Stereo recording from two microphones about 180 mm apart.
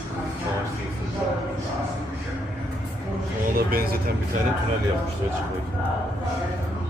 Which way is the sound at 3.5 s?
55° right (ahead or behind).